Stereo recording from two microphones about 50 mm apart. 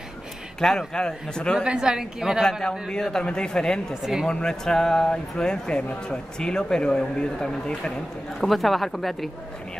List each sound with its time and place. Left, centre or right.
0.6 s speech: centre
1.6 s a woman's voice: centre
2.9 s speech: centre
4.0 s a woman's voice: centre
4.3 s speech: centre
8.5 s speech: centre